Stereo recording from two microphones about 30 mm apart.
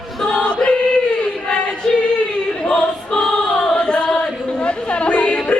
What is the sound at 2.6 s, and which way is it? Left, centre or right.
Choir, left.